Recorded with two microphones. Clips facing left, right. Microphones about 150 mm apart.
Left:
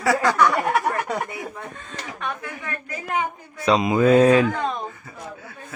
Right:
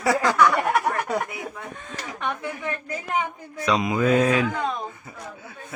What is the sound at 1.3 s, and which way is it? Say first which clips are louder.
Speech: left 1 dB; 5° right (ahead or behind).